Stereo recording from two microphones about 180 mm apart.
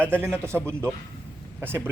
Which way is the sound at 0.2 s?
15° right (ahead or behind).